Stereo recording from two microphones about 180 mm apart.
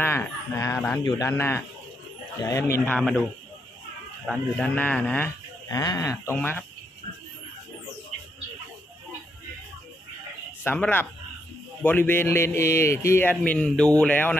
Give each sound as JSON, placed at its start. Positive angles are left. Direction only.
{"t": 0.0, "sound": "a man's voice", "side_deg": 15}
{"t": 3.0, "sound": "a man's voice", "side_deg": 0}
{"t": 4.3, "sound": "a man's voice", "side_deg": 5}
{"t": 5.7, "sound": "speech", "side_deg": 20}
{"t": 10.6, "sound": "a man's voice", "side_deg": 10}